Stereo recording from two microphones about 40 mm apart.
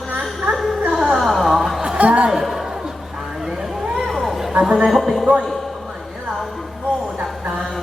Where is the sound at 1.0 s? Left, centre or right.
Centre.